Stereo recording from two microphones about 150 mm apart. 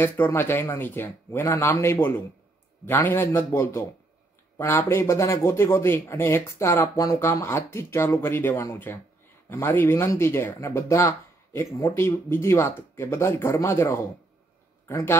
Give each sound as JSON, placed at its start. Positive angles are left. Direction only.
{"t": 0.0, "sound": "speech", "side_deg": 15}